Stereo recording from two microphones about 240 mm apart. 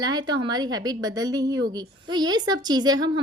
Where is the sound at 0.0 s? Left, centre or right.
Centre.